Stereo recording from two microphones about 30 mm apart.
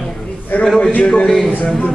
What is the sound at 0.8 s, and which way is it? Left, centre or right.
Speech, left.